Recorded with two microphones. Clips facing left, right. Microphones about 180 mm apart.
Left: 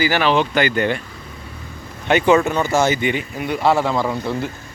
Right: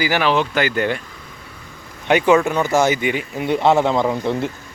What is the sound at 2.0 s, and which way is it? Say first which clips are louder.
Speech: even; 10° right (ahead or behind).